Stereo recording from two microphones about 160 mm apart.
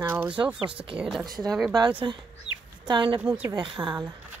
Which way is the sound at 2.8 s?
30° right (ahead or behind).